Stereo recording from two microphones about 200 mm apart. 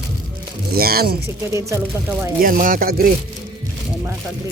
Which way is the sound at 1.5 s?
10° right (ahead or behind).